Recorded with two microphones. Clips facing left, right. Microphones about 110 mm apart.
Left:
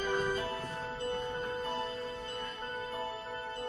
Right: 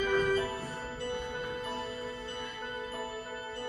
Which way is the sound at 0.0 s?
30° left (ahead or behind).